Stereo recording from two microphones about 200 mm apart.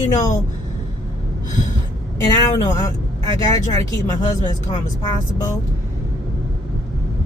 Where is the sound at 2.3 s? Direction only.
20° left (ahead or behind).